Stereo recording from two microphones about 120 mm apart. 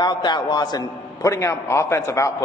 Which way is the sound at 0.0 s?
40° left (ahead or behind).